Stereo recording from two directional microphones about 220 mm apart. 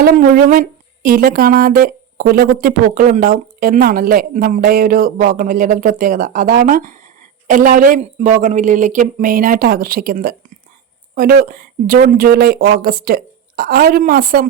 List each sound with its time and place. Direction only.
0.0 s speech: 40° right (ahead or behind)